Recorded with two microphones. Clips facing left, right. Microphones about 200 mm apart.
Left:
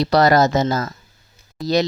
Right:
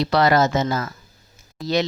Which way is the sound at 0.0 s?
40° left (ahead or behind).